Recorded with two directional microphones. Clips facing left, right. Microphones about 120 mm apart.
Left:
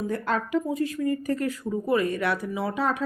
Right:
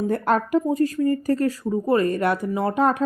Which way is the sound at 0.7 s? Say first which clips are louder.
Right 5 dB; 40° right (ahead or behind).